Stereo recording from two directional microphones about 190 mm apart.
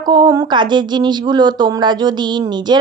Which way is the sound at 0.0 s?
20° right (ahead or behind).